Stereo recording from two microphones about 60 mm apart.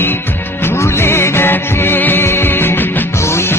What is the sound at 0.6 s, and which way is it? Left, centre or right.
Music, left.